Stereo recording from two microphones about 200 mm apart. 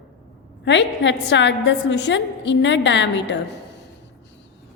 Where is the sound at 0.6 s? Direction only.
60° left (ahead or behind).